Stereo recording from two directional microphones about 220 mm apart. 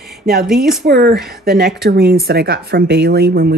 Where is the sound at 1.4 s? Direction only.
45° right (ahead or behind).